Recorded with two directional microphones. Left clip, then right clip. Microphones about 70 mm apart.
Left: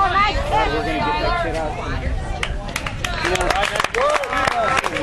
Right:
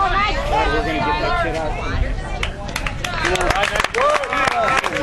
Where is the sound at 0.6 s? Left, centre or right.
Right.